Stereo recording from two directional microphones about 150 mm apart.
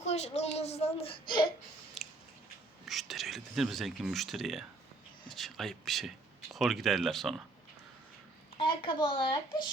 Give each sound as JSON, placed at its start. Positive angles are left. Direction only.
{"t": 0.0, "sound": "a woman's voice", "side_deg": 45}
{"t": 2.0, "sound": "biting", "side_deg": 0}
{"t": 2.8, "sound": "speech", "side_deg": 0}
{"t": 8.5, "sound": "a woman's voice", "side_deg": 35}